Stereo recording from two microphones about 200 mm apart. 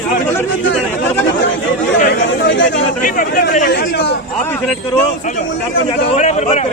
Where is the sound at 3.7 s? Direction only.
60° left (ahead or behind).